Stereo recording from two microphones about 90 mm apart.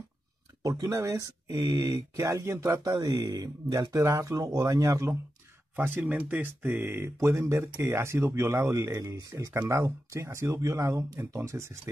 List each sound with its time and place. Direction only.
0.6 s speech: 35° right (ahead or behind)
1.7 s speech: 50° right (ahead or behind)
2.2 s speech: 30° right (ahead or behind)
2.9 s speech: 45° right (ahead or behind)
3.9 s speech: 35° right (ahead or behind)
5.8 s speech: 20° right (ahead or behind)